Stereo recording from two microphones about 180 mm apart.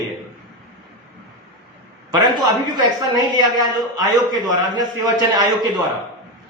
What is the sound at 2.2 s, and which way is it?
A man's voice, 25° right (ahead or behind).